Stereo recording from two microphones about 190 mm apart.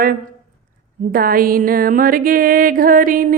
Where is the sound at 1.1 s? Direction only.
50° right (ahead or behind).